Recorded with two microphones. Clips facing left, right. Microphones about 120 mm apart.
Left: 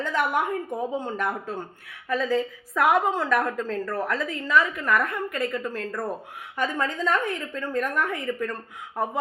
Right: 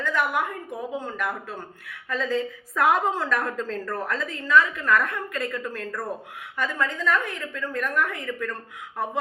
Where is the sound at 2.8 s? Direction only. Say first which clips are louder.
Left 1 dB; 10° left (ahead or behind); by 8.5 s 25° left (ahead or behind).